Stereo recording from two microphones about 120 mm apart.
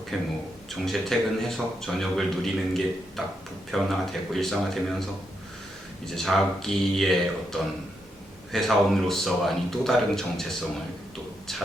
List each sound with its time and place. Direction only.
0.1 s speech: centre (ahead or behind)
6.1 s speech: centre (ahead or behind)